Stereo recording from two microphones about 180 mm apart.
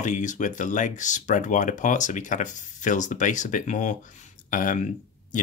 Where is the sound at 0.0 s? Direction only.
45° left (ahead or behind).